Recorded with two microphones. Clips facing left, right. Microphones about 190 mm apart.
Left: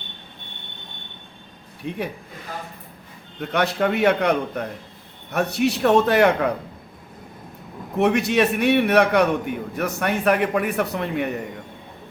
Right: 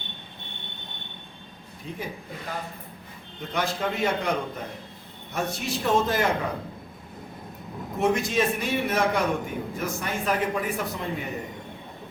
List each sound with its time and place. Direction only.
1.9 s a man's voice: 65° left (ahead or behind)
3.4 s a man's voice: 65° left (ahead or behind)
7.9 s a man's voice: 70° left (ahead or behind)